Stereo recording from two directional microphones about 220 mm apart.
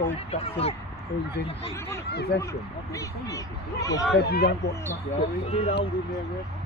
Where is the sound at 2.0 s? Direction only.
50° left (ahead or behind).